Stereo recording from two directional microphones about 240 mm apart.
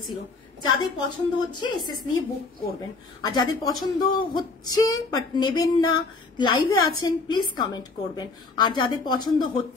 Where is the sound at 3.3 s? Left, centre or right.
Centre.